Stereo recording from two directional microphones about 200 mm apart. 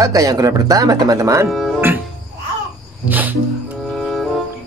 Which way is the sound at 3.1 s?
10° right (ahead or behind).